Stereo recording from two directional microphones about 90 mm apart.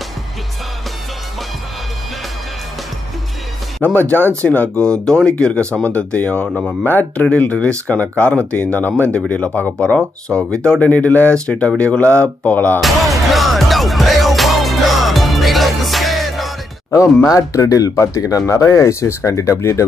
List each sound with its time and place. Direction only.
3.8 s speech: 15° left (ahead or behind)
6.8 s speech: 20° left (ahead or behind)
12.8 s music: centre (ahead or behind)
17.3 s speech: 40° left (ahead or behind)